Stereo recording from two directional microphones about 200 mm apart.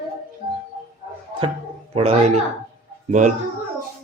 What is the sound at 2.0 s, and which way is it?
A man's voice, 30° right (ahead or behind).